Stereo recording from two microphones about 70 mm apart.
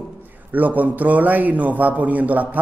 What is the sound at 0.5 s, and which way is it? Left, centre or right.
Speech, right.